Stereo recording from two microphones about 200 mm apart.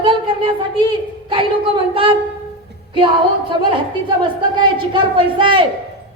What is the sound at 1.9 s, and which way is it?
Speech, 25° right (ahead or behind).